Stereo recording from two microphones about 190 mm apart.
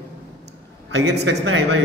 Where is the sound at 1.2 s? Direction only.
90° right.